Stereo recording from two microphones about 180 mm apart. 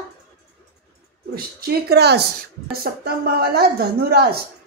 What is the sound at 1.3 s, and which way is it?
Speech, 60° right (ahead or behind).